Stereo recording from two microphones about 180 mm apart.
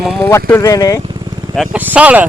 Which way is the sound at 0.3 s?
15° left (ahead or behind).